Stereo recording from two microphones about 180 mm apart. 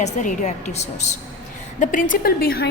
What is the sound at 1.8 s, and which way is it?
Speech, 50° left (ahead or behind).